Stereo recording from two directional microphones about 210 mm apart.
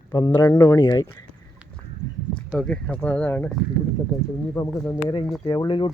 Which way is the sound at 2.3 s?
5° left (ahead or behind).